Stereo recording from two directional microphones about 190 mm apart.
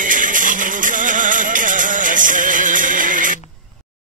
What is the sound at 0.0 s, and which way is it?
Music, 45° right (ahead or behind).